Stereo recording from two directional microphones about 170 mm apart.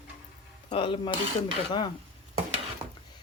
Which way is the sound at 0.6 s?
30° left (ahead or behind).